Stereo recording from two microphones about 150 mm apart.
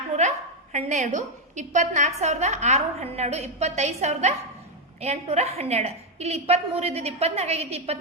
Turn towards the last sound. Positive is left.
turn(degrees=-45)  # may be behind; listen again after turning